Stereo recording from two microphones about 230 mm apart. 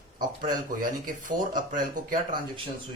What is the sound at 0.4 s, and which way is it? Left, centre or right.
Speech, right.